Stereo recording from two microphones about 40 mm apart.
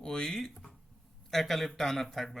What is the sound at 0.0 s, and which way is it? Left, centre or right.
Speech, centre.